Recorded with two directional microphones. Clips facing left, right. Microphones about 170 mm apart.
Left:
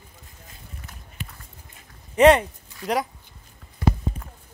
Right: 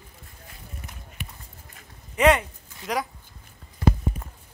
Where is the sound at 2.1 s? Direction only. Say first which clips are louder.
Left 5 dB; 35° left (ahead or behind).